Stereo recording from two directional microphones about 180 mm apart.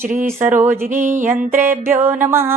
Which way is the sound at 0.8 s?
45° right (ahead or behind).